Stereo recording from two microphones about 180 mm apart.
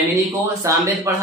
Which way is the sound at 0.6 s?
15° right (ahead or behind).